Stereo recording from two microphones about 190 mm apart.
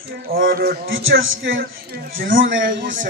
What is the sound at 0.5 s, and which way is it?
Speech, 50° right (ahead or behind).